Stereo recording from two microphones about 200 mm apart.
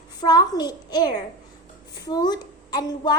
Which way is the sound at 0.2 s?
20° left (ahead or behind).